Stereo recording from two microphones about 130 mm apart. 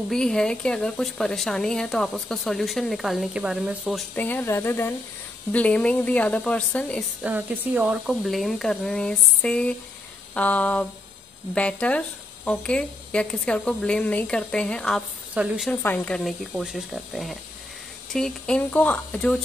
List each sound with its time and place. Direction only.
0.1 s speech: 5° left (ahead or behind)
4.1 s speech: 15° left (ahead or behind)
7.2 s speech: 10° right (ahead or behind); by 15.0 s 5° left (ahead or behind)
15.3 s a woman's voice: 5° right (ahead or behind)
15.7 s speech: 15° left (ahead or behind)
16.2 s speech: centre (ahead or behind)